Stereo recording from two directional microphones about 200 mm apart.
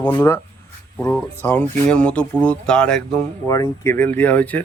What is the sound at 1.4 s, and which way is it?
Speech, 10° left (ahead or behind).